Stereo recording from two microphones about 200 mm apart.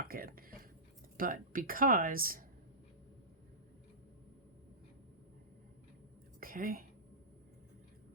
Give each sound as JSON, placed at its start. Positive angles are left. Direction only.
{"t": 0.0, "sound": "speech", "side_deg": -45}
{"t": 6.4, "sound": "whispering", "side_deg": -45}